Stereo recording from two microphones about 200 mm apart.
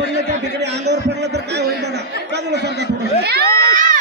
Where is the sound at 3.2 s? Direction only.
50° right (ahead or behind).